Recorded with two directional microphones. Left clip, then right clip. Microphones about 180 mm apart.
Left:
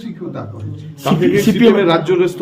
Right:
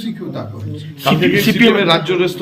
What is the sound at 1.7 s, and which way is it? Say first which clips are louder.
Speech: left 1 dB; 65° left (ahead or behind).